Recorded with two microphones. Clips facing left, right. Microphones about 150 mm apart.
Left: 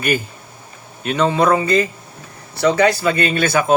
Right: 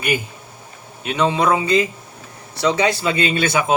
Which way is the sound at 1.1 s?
15° right (ahead or behind).